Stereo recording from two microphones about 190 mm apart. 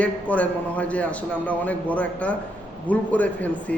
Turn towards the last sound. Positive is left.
turn(degrees=5)  # may be behind; listen again after turning